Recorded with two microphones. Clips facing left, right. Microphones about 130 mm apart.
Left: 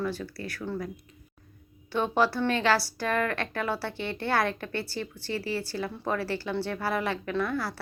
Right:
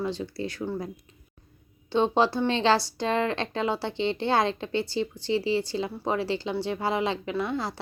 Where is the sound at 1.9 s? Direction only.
25° right (ahead or behind).